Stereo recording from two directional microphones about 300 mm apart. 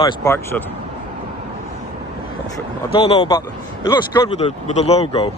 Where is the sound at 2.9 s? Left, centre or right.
Centre.